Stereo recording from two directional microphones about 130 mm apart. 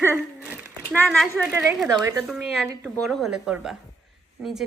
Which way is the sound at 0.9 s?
5° left (ahead or behind).